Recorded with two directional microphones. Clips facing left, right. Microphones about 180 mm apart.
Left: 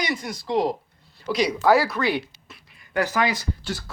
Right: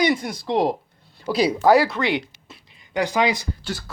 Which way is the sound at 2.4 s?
25° right (ahead or behind).